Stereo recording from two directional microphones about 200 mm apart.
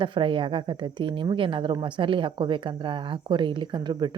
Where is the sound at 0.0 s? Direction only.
25° right (ahead or behind).